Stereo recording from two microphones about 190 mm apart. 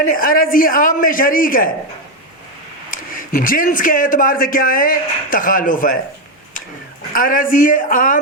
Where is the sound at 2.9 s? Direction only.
45° left (ahead or behind).